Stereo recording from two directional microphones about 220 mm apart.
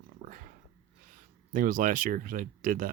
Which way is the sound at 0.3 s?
40° right (ahead or behind).